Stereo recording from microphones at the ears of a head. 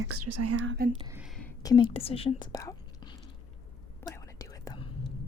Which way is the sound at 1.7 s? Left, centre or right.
Left.